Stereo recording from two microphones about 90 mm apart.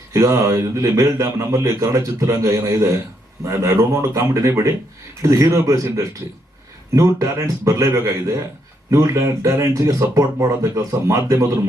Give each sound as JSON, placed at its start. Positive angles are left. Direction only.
{"t": 0.1, "sound": "a man's voice", "side_deg": -35}